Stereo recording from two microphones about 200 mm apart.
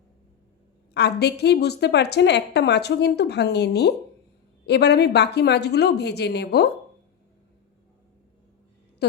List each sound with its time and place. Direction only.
0.9 s a woman's voice: 55° left (ahead or behind)